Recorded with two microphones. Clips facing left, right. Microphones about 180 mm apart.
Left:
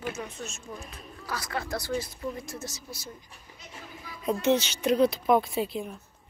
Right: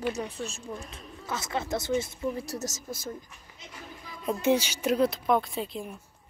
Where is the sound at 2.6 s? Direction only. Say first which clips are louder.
Right 5 dB; 45° right (ahead or behind).